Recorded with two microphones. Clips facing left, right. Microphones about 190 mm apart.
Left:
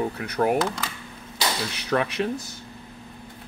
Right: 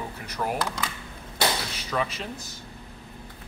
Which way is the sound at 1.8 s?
65° left (ahead or behind).